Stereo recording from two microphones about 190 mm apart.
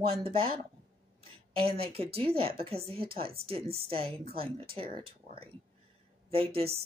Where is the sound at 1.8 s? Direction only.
30° right (ahead or behind).